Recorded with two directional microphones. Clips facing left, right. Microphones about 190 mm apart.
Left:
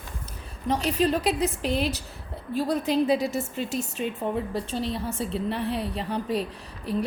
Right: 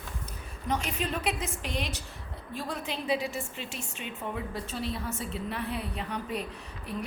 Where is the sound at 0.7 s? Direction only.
35° left (ahead or behind).